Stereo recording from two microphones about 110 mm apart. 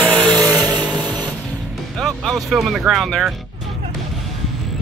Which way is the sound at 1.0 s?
40° right (ahead or behind).